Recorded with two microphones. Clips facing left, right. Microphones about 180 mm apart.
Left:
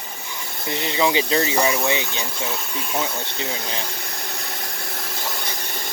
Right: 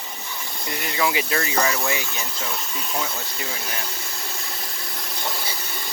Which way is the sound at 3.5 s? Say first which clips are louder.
Left 3 dB; 25° left (ahead or behind).